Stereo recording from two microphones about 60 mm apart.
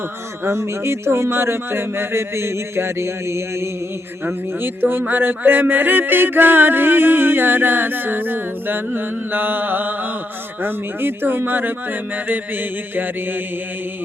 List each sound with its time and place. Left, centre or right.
0.4 s speech: right
4.3 s speech: right